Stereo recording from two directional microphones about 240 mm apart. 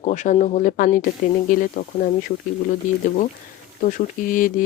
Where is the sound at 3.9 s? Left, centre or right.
Left.